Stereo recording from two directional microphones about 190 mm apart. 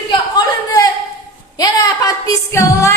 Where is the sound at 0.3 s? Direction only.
20° left (ahead or behind).